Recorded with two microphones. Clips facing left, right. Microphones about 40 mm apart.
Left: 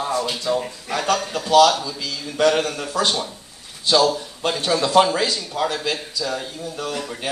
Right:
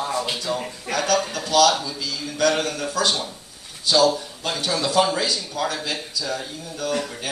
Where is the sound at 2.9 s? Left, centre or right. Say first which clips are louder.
Left 1 dB; left.